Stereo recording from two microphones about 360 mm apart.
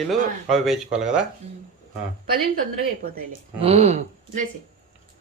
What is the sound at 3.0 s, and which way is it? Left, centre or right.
A woman's voice, right.